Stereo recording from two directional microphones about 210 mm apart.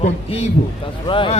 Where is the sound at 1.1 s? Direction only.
25° left (ahead or behind).